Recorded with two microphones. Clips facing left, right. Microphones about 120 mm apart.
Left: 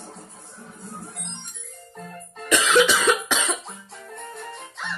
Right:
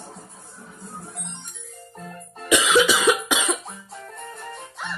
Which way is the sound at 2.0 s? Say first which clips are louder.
Even; 5° right (ahead or behind).